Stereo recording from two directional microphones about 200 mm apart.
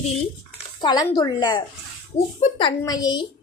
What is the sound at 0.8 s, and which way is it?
A woman's voice, 20° left (ahead or behind).